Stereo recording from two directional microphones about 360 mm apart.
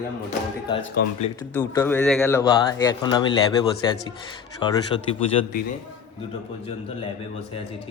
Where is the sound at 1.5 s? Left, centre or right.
Centre.